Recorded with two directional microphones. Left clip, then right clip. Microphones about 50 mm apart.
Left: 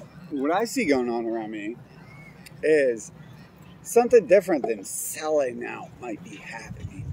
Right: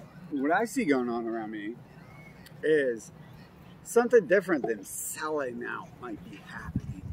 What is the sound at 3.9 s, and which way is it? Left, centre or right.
Speech, centre.